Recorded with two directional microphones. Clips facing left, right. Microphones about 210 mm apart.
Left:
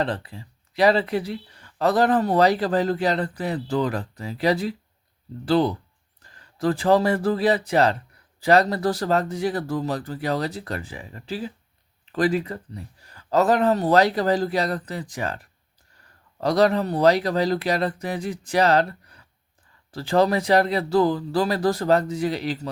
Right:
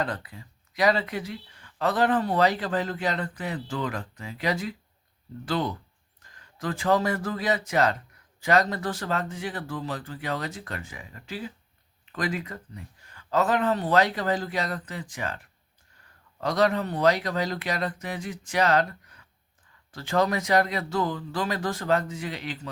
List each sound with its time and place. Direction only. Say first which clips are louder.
0.0 s speech: left 4 dB; 30° left (ahead or behind)
16.4 s speech: left 5 dB; 35° left (ahead or behind)